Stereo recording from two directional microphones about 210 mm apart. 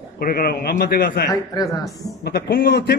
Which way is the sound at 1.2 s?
15° left (ahead or behind).